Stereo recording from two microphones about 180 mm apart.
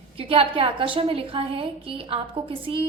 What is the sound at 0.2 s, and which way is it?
A woman's voice, 30° right (ahead or behind).